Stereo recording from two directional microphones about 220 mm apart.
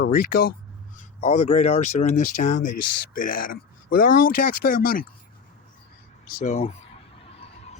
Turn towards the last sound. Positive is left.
turn(degrees=25)  # may be behind; listen again after turning